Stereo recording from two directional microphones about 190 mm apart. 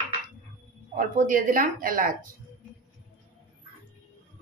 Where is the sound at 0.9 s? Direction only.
45° right (ahead or behind).